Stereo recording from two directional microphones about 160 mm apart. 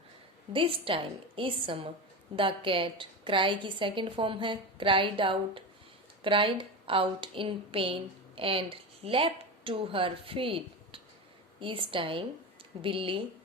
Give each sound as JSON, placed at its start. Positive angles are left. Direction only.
{"t": 0.5, "sound": "a woman's voice", "side_deg": -35}